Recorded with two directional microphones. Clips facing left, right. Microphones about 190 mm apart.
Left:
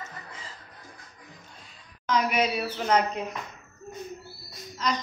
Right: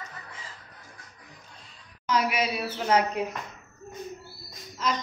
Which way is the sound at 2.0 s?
5° right (ahead or behind).